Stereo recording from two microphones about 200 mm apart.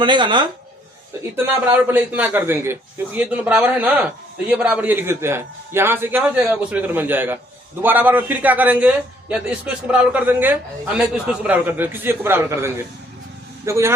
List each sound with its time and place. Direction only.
0.0 s speech: 25° right (ahead or behind)
1.4 s a man's voice: 10° right (ahead or behind)